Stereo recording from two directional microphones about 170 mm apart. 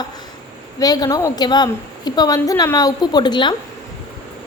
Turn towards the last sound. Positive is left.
turn(degrees=25)  # may be behind; listen again after turning